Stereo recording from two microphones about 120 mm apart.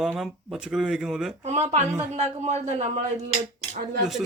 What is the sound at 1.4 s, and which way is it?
Speech, 70° right (ahead or behind).